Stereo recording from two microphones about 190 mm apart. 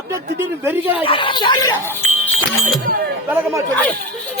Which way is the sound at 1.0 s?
25° left (ahead or behind).